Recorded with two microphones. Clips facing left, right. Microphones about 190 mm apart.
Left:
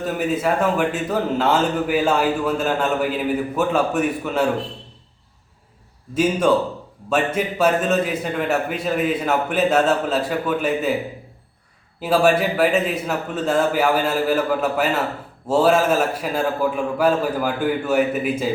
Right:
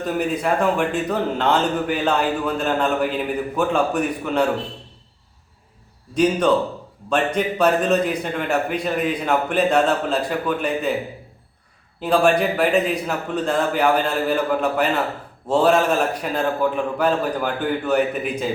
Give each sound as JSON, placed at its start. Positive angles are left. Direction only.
{"t": 0.0, "sound": "a man's voice", "side_deg": 0}
{"t": 7.1, "sound": "a man's voice", "side_deg": 5}
{"t": 11.9, "sound": "a man's voice", "side_deg": 5}